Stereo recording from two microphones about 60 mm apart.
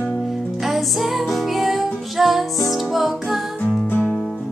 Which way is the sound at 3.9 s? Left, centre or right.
Left.